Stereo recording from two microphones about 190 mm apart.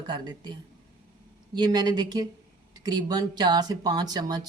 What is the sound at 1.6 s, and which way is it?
Speech, 20° right (ahead or behind).